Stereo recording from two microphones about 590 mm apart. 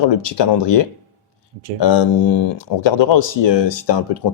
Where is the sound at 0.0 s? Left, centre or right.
Left.